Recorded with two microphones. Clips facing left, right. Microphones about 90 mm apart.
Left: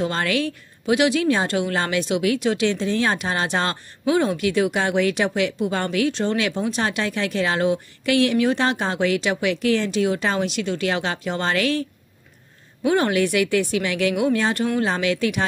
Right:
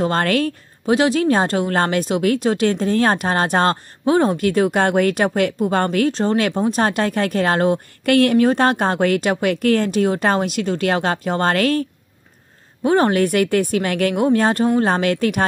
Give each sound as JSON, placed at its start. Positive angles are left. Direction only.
{"t": 0.0, "sound": "a woman's voice", "side_deg": -50}
{"t": 12.8, "sound": "a woman's voice", "side_deg": -40}